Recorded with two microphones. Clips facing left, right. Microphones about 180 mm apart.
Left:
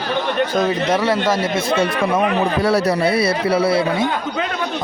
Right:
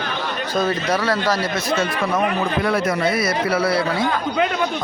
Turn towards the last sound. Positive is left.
turn(degrees=25)  # may be behind; listen again after turning